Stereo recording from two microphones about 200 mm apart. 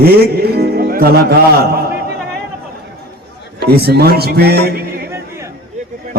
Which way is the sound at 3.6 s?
50° right (ahead or behind).